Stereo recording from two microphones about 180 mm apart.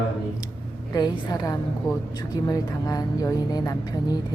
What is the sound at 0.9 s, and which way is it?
Speech, 20° left (ahead or behind).